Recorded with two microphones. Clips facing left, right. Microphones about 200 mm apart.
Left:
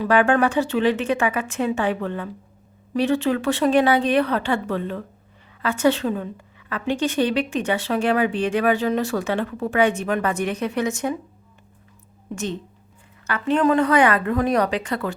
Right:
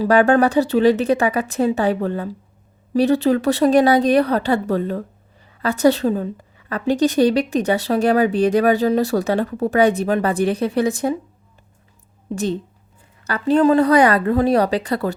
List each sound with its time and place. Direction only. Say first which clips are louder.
0.0 s a woman's voice: right 4 dB; 40° right (ahead or behind)
12.3 s a woman's voice: right 6 dB; 35° right (ahead or behind)